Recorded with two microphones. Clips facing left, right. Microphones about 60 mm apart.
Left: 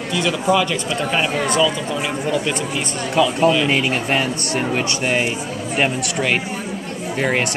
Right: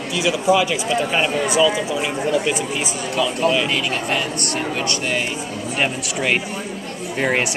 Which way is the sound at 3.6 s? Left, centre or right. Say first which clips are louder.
Left 3 dB; left.